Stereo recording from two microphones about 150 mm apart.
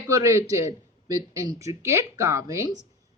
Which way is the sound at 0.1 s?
20° right (ahead or behind).